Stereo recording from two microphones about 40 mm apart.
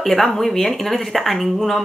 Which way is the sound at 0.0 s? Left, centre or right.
Centre.